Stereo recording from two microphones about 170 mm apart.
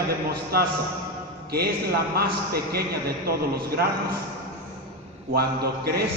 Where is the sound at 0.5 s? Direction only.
65° right (ahead or behind).